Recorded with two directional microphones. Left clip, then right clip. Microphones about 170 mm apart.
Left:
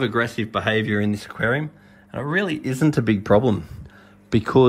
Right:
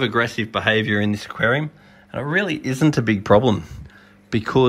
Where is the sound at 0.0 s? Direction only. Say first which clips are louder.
Right 2 dB; centre (ahead or behind).